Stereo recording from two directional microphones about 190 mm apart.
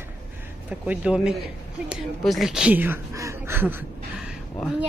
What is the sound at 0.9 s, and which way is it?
Speech, 5° right (ahead or behind).